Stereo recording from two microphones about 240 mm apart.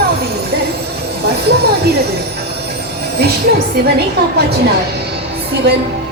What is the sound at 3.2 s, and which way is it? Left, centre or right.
Music, right.